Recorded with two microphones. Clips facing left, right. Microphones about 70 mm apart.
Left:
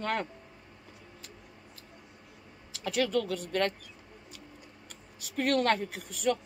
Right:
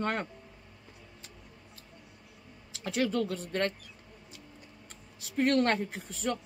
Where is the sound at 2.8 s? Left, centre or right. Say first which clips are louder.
Left 1 dB; right.